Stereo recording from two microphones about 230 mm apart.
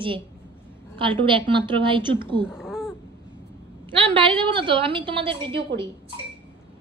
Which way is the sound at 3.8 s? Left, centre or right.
Right.